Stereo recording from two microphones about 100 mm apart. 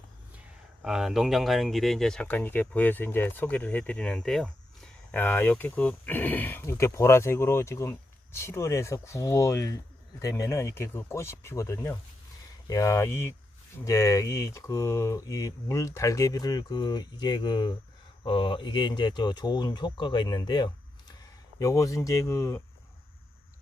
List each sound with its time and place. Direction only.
0.8 s speech: 5° right (ahead or behind)
2.2 s speech: 15° left (ahead or behind)
5.1 s speech: 20° left (ahead or behind)
12.6 s speech: 35° left (ahead or behind)
21.6 s speech: 35° left (ahead or behind)